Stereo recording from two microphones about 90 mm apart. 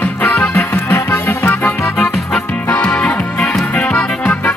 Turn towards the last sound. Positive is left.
turn(degrees=10)  # may be behind; listen again after turning